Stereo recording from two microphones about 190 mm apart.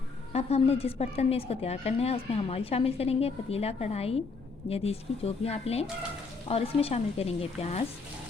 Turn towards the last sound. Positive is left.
turn(degrees=35)  # may be behind; listen again after turning